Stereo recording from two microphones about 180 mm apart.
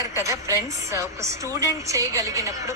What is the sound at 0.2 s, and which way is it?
A woman's voice, 15° right (ahead or behind).